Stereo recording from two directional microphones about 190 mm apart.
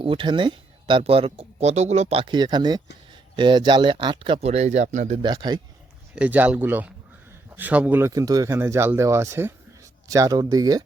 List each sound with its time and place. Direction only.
0.0 s speech: 25° right (ahead or behind)
5.2 s speech: 20° right (ahead or behind)
6.1 s speech: 10° right (ahead or behind)